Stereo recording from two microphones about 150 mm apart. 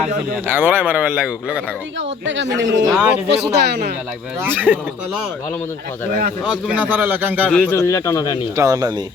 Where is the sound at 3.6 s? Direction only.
90° right.